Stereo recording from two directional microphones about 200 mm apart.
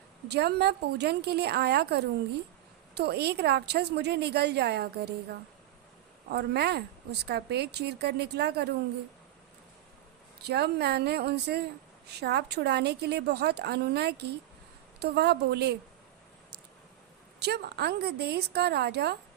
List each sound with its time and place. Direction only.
0.3 s speech: 55° right (ahead or behind)
6.3 s speech: 55° right (ahead or behind)
10.4 s speech: 55° right (ahead or behind)
17.4 s speech: 55° right (ahead or behind)